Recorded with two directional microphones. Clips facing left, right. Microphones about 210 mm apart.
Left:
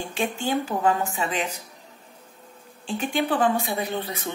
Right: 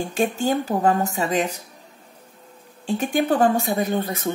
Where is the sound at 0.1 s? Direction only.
40° right (ahead or behind).